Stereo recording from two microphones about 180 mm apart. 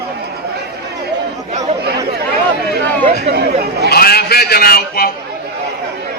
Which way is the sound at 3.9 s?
60° left (ahead or behind).